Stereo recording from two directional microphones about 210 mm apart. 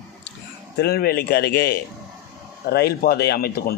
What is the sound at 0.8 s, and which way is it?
A man's voice, 50° left (ahead or behind).